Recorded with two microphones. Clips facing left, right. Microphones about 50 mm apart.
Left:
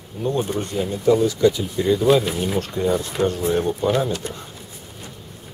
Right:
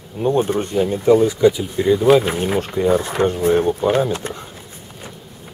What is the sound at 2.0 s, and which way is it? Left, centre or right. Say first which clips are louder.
Speech: right 4 dB; right.